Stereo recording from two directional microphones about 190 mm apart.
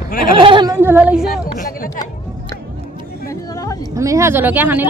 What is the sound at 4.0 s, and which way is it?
Speech, 15° right (ahead or behind).